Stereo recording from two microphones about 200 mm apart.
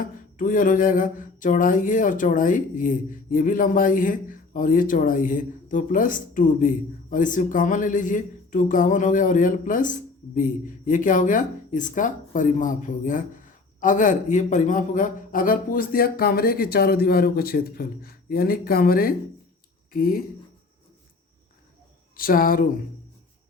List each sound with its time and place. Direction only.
0.0 s a sound: 40° left (ahead or behind)
10.3 s speech: 40° left (ahead or behind)
22.1 s speech: 45° left (ahead or behind)